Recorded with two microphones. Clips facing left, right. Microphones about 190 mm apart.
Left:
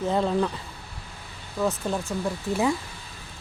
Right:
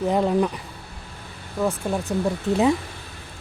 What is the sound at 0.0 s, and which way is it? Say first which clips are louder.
A woman's voice: right 3 dB; 15° right (ahead or behind).